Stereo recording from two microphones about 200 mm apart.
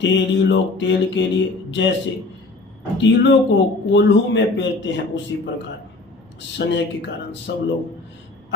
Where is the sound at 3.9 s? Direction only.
65° left (ahead or behind).